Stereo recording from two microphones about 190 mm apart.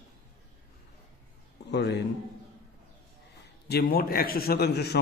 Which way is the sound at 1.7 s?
65° left (ahead or behind).